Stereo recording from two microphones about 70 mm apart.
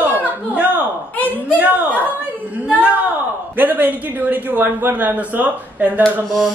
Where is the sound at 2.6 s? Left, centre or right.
Centre.